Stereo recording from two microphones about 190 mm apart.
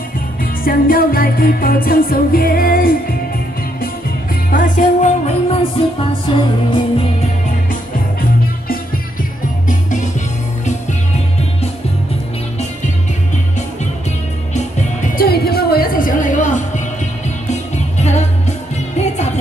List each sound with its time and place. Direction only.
0.4 s music: 50° left (ahead or behind)
4.5 s music: 45° left (ahead or behind); by 7.1 s 25° left (ahead or behind)
9.7 s music: 40° left (ahead or behind)
15.1 s music: 55° left (ahead or behind); by 19.3 s 35° left (ahead or behind)